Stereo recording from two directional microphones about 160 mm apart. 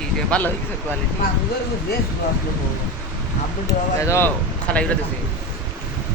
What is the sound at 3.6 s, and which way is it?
Speech, 20° left (ahead or behind).